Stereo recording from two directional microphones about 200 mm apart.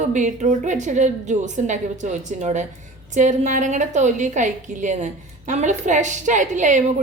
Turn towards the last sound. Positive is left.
turn(degrees=-40)  # may be behind; listen again after turning